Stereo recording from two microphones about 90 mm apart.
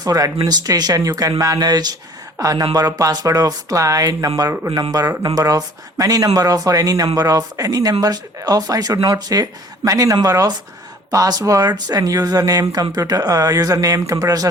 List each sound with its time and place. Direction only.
0.0 s speech: 40° right (ahead or behind)